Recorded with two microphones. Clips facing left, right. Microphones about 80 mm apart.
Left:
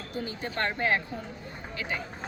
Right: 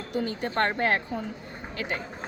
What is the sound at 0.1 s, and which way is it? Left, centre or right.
Speech, right.